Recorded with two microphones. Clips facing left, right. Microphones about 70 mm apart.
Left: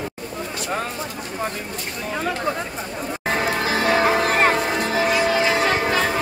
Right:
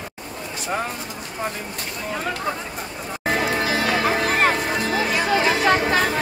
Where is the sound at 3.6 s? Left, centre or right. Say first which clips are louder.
Left 2 dB; left.